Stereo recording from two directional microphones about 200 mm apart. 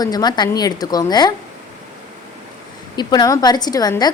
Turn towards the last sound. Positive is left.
turn(degrees=20)  # may be behind; listen again after turning